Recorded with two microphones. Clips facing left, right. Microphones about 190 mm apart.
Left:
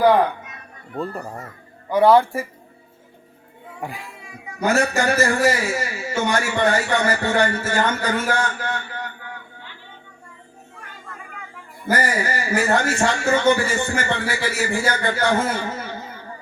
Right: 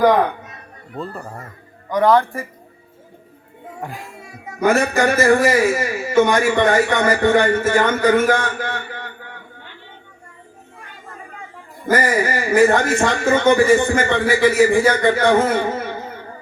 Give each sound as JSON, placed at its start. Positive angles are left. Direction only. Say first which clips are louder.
{"t": 0.9, "sound": "speech", "louder": "left 1 dB", "side_deg": 10}
{"t": 3.9, "sound": "a man's voice", "louder": "right 2 dB", "side_deg": -45}
{"t": 12.2, "sound": "a man's voice", "louder": "right 8 dB", "side_deg": -55}